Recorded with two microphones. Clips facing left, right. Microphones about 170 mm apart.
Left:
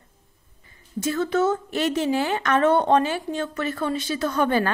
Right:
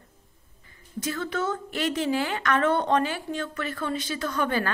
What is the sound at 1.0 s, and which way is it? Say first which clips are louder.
A woman's voice: left 7 dB; 20° left (ahead or behind).